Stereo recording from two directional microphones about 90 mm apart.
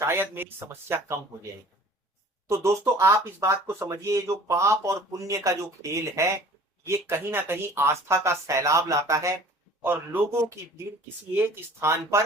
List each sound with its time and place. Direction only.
0.0 s speech: 25° right (ahead or behind)
2.5 s speech: 30° right (ahead or behind)
9.8 s speech: 20° right (ahead or behind)
11.3 s speech: 25° right (ahead or behind)